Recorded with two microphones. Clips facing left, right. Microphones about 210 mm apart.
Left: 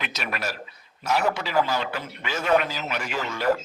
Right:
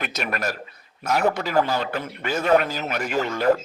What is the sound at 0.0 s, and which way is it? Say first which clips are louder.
A man's voice: right 4 dB; 45° right (ahead or behind).